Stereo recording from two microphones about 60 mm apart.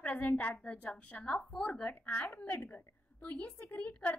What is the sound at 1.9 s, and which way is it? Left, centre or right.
A woman's voice, left.